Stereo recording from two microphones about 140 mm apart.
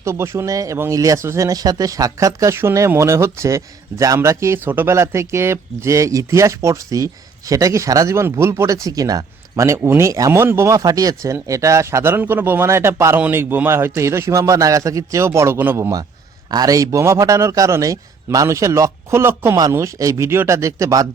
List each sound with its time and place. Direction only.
0.0 s speech: 20° right (ahead or behind)